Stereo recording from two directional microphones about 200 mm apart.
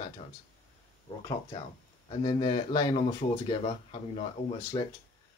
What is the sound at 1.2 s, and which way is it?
Speech, 20° left (ahead or behind).